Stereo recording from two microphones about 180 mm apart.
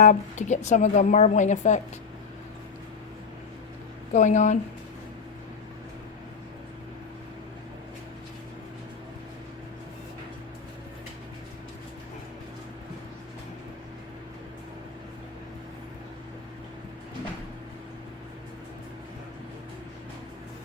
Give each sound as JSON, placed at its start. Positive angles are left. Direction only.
{"t": 0.0, "sound": "speech", "side_deg": 40}
{"t": 4.1, "sound": "speech", "side_deg": 40}